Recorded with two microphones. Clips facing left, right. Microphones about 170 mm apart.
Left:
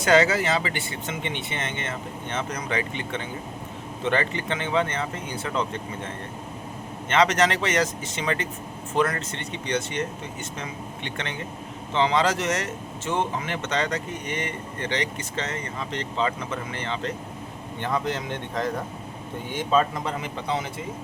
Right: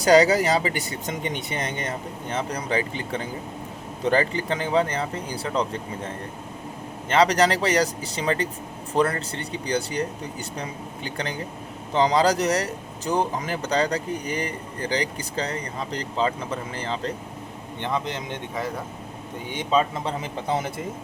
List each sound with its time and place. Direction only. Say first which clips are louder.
0.0 s speech: right 3 dB; 35° right (ahead or behind)
7.1 s speech: right 2 dB; 35° right (ahead or behind)
17.7 s speech: left 1 dB; 20° right (ahead or behind)
19.5 s speech: even; 20° right (ahead or behind)
20.1 s speech: right 2 dB; 35° right (ahead or behind)